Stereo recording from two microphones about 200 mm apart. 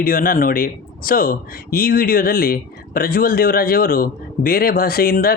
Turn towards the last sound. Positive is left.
turn(degrees=50)  # may be behind; listen again after turning